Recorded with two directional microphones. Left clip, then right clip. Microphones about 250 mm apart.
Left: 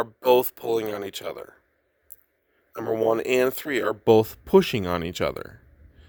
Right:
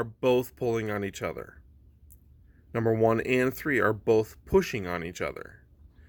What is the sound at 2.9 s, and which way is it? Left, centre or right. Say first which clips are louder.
Speech: left 5 dB; left.